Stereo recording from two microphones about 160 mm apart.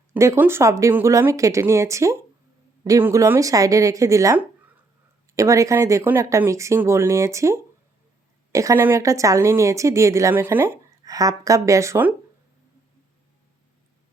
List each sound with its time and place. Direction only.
0.1 s speech: 15° right (ahead or behind)